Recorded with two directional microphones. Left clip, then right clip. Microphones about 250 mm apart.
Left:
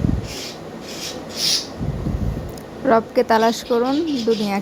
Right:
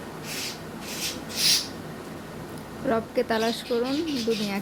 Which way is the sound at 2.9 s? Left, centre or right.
Centre.